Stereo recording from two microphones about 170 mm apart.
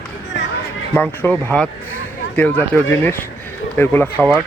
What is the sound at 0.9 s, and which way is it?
Speech, 10° left (ahead or behind).